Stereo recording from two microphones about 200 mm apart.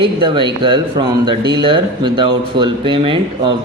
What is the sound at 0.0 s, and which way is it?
Speech, 25° right (ahead or behind).